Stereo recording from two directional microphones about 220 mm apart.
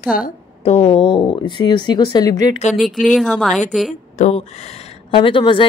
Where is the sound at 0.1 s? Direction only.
40° left (ahead or behind).